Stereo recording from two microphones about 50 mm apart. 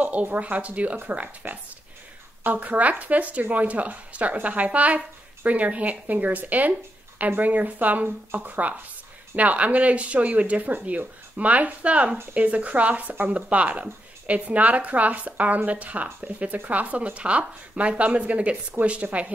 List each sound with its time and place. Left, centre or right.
0.0 s speech: right